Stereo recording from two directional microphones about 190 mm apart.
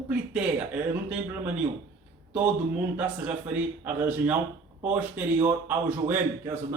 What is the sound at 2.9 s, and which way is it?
A man's voice, 5° right (ahead or behind).